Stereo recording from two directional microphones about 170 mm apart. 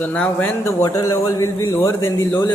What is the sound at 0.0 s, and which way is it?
Speech, 10° left (ahead or behind).